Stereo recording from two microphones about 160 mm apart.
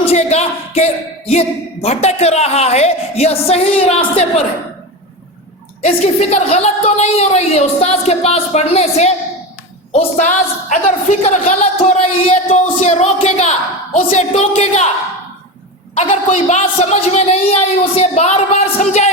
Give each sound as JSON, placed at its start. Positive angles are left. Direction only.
{"t": 0.0, "sound": "a sound", "side_deg": 40}
{"t": 1.3, "sound": "a woman's voice", "side_deg": 40}
{"t": 5.8, "sound": "a woman's voice", "side_deg": 45}
{"t": 12.5, "sound": "a woman's voice", "side_deg": 45}
{"t": 16.0, "sound": "a woman's voice", "side_deg": 45}